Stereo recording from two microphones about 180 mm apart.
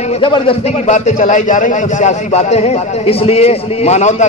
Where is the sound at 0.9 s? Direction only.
45° left (ahead or behind).